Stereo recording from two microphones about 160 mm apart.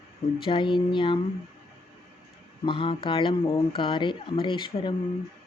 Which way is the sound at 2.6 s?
35° left (ahead or behind).